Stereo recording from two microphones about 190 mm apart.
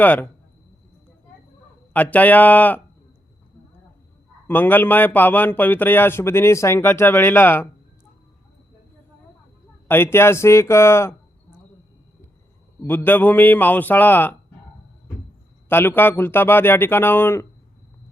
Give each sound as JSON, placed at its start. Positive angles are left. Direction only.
{"t": 0.0, "sound": "a man's voice", "side_deg": 10}
{"t": 1.9, "sound": "a man's voice", "side_deg": 10}
{"t": 4.4, "sound": "a man's voice", "side_deg": 10}
{"t": 9.9, "sound": "a man's voice", "side_deg": 10}
{"t": 12.8, "sound": "a man's voice", "side_deg": 10}
{"t": 15.7, "sound": "a man's voice", "side_deg": 10}